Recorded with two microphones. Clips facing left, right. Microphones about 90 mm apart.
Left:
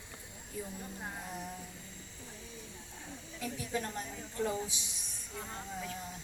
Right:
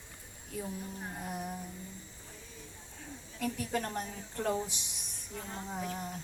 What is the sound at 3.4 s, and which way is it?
A woman's voice, 55° right (ahead or behind).